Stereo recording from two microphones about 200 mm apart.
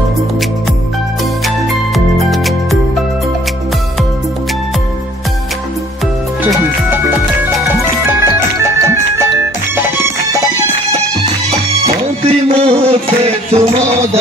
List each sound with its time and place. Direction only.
2.1 s music: centre (ahead or behind)
8.1 s music: 10° right (ahead or behind)
11.8 s music: 30° right (ahead or behind)